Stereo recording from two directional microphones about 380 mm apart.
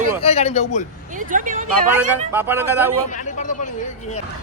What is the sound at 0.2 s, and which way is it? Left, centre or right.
Speech, centre.